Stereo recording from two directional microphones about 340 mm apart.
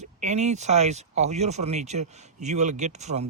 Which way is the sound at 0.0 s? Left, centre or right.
Centre.